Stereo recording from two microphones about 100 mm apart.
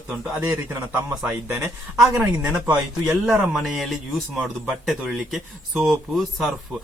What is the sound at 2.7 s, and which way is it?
Speech, 15° right (ahead or behind).